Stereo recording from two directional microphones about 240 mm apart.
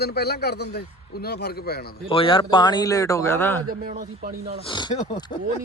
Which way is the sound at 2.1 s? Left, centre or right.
Left.